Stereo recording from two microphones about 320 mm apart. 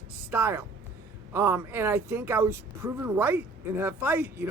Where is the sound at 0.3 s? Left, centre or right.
Centre.